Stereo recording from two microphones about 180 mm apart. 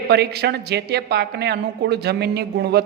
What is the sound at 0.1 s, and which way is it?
A woman's voice, 65° right (ahead or behind).